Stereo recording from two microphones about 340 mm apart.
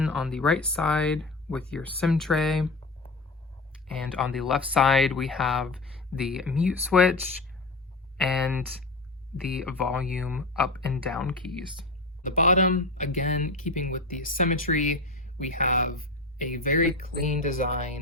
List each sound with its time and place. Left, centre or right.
0.0 s speech: centre
4.2 s speech: centre
8.2 s speech: centre
9.6 s speech: centre
12.2 s speech: left